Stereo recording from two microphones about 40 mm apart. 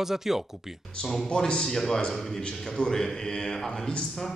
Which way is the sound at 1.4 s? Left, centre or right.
Centre.